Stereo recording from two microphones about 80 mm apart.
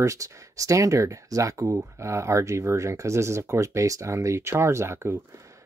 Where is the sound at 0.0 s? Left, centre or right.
Right.